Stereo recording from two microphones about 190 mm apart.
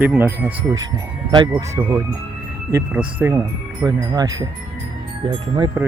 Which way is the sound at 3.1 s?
15° right (ahead or behind).